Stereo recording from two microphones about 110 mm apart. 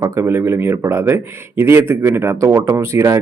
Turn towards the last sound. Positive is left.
turn(degrees=-25)  # may be behind; listen again after turning